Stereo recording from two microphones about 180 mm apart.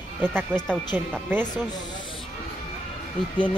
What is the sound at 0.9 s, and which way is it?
Speech, 10° right (ahead or behind).